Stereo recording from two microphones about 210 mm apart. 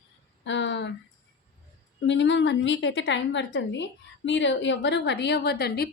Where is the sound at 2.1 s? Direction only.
60° left (ahead or behind).